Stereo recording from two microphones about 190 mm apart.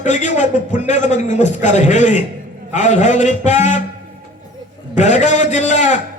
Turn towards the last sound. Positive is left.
turn(degrees=40)  # may be behind; listen again after turning